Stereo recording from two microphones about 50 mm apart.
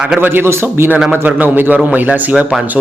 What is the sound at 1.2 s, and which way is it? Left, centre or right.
Speech, right.